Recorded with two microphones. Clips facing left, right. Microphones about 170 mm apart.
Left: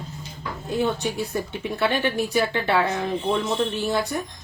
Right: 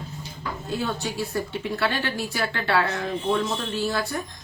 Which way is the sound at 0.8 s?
20° left (ahead or behind).